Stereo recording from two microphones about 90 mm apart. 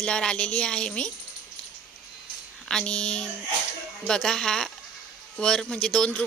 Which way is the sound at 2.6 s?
10° left (ahead or behind).